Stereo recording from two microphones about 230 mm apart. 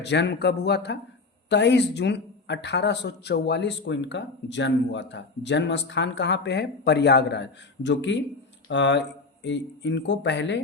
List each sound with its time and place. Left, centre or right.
0.0 s speech: left